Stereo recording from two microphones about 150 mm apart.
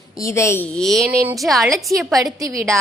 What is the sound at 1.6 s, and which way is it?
A woman's voice, 20° right (ahead or behind).